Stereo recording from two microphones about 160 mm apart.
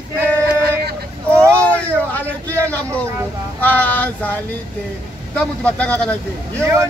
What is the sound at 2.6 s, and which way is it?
Speech, 10° left (ahead or behind).